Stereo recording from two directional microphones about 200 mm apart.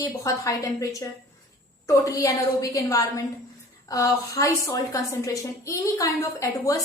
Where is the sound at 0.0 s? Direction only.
15° left (ahead or behind).